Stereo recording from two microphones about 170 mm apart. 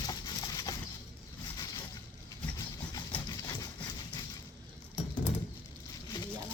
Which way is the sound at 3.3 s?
20° left (ahead or behind).